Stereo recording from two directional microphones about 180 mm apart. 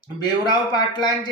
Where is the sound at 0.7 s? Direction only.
25° left (ahead or behind).